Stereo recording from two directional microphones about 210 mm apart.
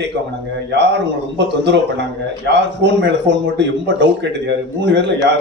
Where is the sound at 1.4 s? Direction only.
55° right (ahead or behind).